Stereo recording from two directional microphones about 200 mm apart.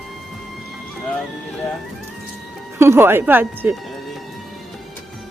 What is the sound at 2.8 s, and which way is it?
Speech, 10° right (ahead or behind).